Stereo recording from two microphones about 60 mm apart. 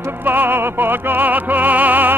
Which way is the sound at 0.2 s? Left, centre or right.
Right.